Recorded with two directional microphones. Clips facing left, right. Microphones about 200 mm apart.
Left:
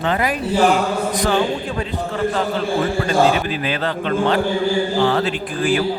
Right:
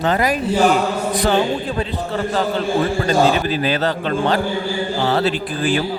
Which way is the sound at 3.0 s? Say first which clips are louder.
Even; 35° right (ahead or behind).